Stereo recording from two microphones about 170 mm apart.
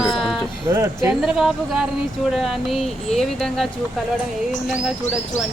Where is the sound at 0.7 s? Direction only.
15° right (ahead or behind).